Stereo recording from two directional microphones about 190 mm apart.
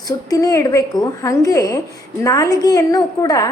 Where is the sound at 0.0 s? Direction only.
20° left (ahead or behind).